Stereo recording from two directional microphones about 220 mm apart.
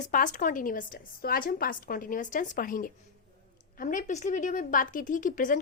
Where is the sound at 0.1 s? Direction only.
35° left (ahead or behind).